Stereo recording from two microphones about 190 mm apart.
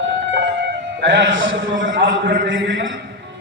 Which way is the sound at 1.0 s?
65° right (ahead or behind).